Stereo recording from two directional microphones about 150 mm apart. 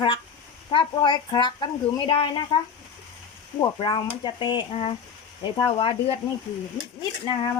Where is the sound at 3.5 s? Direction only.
30° left (ahead or behind).